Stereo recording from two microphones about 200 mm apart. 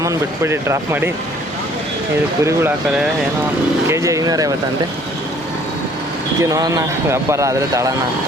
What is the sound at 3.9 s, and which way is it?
Speech, 15° right (ahead or behind).